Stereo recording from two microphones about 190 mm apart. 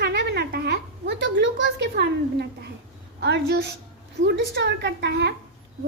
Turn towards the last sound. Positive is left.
turn(degrees=-65)  # may be behind; listen again after turning